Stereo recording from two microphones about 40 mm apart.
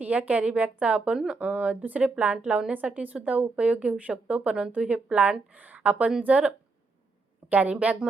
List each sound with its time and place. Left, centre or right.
0.0 s a woman's voice: right
2.8 s speech: right
7.5 s speech: right